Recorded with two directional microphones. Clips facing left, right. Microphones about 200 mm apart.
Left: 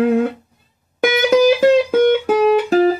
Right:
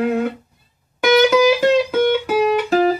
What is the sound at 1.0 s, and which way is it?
Music, 50° left (ahead or behind).